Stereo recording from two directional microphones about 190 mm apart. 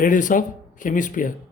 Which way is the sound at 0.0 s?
45° left (ahead or behind).